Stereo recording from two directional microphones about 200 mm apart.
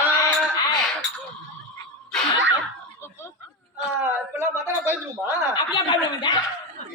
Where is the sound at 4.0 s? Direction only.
10° right (ahead or behind).